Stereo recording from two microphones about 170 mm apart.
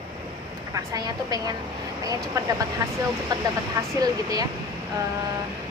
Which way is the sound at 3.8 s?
20° right (ahead or behind).